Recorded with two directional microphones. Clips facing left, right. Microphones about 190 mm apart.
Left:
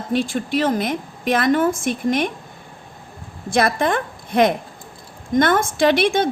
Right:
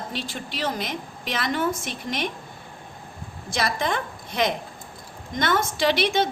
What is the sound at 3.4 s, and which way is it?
A woman's voice, 55° left (ahead or behind).